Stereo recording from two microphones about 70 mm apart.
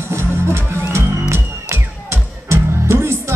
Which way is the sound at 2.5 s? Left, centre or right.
Right.